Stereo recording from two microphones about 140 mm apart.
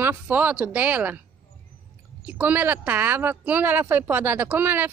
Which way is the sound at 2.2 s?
10° right (ahead or behind).